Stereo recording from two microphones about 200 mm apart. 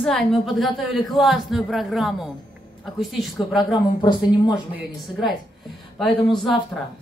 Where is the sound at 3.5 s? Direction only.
25° left (ahead or behind).